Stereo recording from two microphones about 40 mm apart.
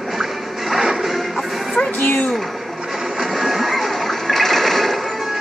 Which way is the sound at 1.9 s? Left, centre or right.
Left.